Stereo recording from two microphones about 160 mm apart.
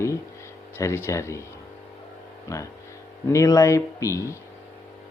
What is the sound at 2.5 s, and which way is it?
Speech, 15° left (ahead or behind).